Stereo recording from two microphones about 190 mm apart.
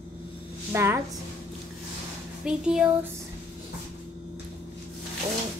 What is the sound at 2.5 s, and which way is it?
Speech, 5° right (ahead or behind).